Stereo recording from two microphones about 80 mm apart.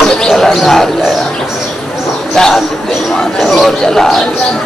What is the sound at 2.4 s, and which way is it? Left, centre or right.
Speech, centre.